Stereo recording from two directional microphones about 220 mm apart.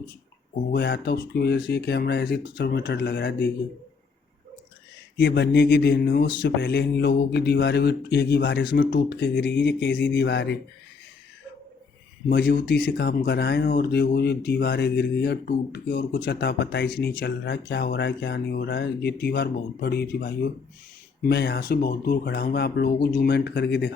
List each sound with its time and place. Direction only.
0.7 s speech: 50° left (ahead or behind)
5.1 s speech: 50° left (ahead or behind)
12.3 s speech: 50° left (ahead or behind)